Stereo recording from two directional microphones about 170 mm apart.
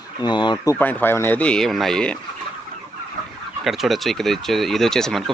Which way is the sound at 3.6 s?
Centre (ahead or behind).